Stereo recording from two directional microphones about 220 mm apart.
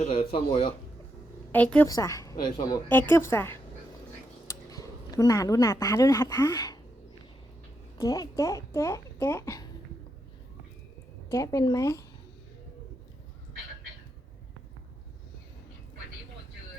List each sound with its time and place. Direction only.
0.0 s speech: 25° left (ahead or behind)
1.5 s speech: 5° left (ahead or behind)
7.9 s speech: 15° left (ahead or behind)
11.3 s speech: 15° left (ahead or behind)